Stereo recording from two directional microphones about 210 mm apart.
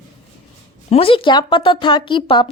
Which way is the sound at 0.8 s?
30° left (ahead or behind).